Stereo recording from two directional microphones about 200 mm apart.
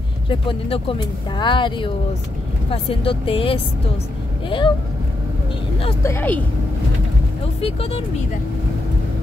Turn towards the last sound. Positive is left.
turn(degrees=30)  # may be behind; listen again after turning